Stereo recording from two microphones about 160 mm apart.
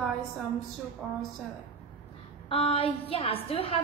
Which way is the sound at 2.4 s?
35° left (ahead or behind).